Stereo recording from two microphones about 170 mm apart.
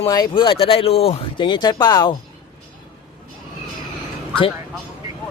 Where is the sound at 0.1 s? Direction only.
25° left (ahead or behind).